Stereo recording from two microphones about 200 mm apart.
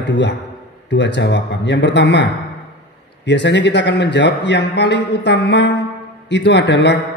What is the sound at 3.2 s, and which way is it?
A man's voice, 60° left (ahead or behind).